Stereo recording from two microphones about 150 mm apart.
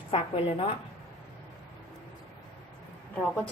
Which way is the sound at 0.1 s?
35° left (ahead or behind).